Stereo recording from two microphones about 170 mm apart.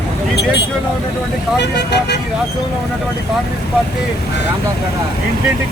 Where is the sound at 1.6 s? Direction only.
80° left.